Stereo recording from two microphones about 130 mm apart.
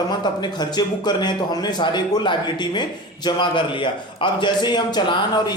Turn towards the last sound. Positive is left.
turn(degrees=35)  # may be behind; listen again after turning